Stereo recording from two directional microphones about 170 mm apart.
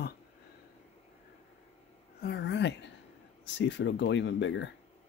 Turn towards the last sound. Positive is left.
turn(degrees=90)